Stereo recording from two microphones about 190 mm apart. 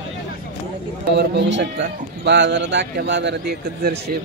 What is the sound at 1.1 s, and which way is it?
Speech, 60° right (ahead or behind).